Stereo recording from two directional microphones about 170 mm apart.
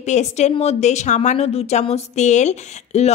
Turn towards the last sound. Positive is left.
turn(degrees=40)  # may be behind; listen again after turning